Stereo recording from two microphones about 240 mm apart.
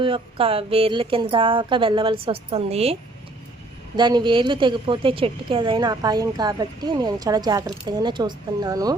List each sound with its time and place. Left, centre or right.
0.0 s a woman's voice: right